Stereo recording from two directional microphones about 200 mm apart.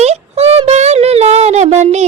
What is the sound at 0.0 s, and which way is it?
Child singing, 30° right (ahead or behind).